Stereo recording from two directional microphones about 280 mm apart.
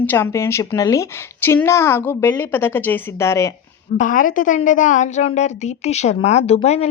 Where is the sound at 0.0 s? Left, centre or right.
Centre.